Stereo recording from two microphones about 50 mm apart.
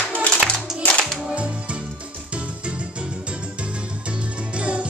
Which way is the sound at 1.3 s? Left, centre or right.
Right.